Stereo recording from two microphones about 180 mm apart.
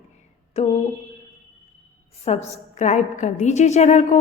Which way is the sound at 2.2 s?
40° left (ahead or behind).